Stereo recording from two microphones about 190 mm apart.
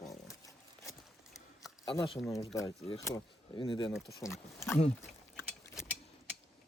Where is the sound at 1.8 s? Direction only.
20° left (ahead or behind).